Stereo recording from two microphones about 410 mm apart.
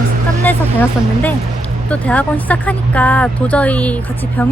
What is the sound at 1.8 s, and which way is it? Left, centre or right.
Speech, centre.